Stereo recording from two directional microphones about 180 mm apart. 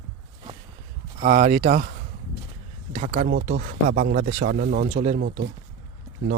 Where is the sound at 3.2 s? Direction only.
50° right (ahead or behind).